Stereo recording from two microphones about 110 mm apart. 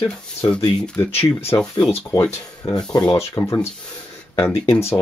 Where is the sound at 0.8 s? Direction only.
15° left (ahead or behind).